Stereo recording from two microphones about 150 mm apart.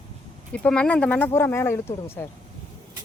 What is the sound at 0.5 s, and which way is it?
Speech, 10° left (ahead or behind).